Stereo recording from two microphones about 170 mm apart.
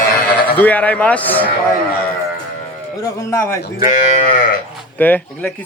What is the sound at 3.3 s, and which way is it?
Speech, 15° left (ahead or behind).